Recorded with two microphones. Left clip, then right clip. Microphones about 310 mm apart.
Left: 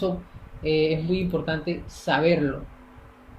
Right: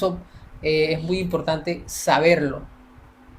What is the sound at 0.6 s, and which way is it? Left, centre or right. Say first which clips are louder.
Speech: right 2 dB; right.